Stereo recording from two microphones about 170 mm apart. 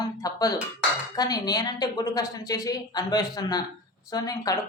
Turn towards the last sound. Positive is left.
turn(degrees=20)  # may be behind; listen again after turning